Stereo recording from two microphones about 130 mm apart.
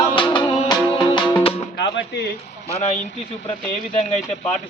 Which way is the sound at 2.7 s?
55° left (ahead or behind).